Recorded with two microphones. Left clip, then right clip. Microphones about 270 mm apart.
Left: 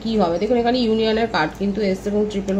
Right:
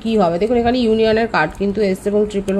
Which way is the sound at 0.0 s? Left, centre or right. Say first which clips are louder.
Right 4 dB; right.